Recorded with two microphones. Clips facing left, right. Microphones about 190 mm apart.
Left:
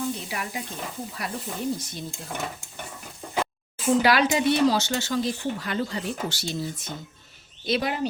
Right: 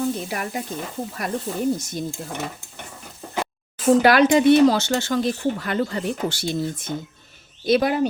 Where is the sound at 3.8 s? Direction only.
50° right (ahead or behind).